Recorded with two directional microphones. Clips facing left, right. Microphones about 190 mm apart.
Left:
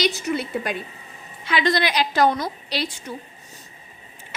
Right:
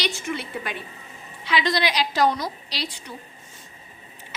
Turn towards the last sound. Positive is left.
turn(degrees=55)  # may be behind; listen again after turning